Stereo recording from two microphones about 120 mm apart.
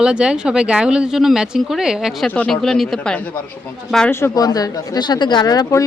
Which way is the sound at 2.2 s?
10° left (ahead or behind).